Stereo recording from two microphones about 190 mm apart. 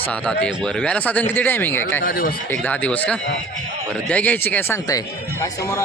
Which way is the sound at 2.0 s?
50° left (ahead or behind).